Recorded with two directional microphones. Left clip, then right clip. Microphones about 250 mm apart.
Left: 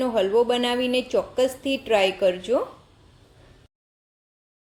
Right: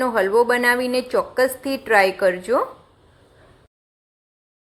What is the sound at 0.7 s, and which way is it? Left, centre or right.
Speech, right.